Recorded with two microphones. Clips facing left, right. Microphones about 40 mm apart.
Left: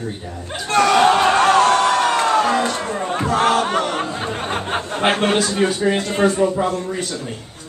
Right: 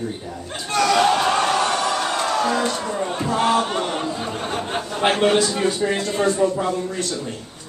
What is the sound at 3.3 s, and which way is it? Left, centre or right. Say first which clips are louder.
Speech: left 3 dB; left.